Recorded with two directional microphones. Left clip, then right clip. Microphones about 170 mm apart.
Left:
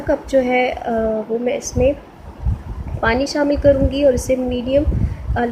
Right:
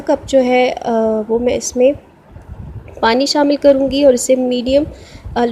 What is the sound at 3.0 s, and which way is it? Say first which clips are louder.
A woman's voice: right 5 dB; 45° right (ahead or behind).